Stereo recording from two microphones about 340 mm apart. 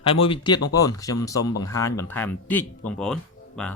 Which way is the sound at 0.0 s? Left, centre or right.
Centre.